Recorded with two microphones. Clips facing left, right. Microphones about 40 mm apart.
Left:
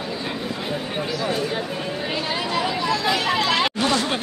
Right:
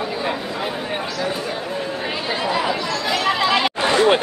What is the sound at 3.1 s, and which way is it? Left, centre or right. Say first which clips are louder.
Chatter: right 4 dB; centre.